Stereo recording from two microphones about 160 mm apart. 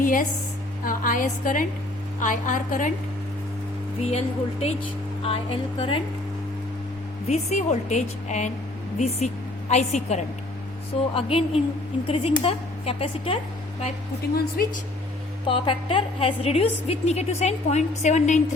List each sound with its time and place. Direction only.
0.0 s a woman's voice: 55° left (ahead or behind)
4.0 s a woman's voice: 40° left (ahead or behind)
7.3 s a woman's voice: 45° left (ahead or behind)
11.1 s a woman's voice: 35° left (ahead or behind)
14.3 s a woman's voice: 70° left (ahead or behind)
15.4 s a woman's voice: 35° left (ahead or behind)